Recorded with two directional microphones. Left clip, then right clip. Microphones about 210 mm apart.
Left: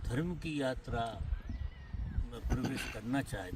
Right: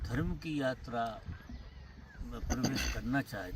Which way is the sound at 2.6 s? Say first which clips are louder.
Right 5 dB; 50° right (ahead or behind).